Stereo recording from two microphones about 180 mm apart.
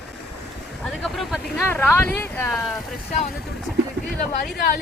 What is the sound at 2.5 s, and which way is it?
Speech, centre (ahead or behind).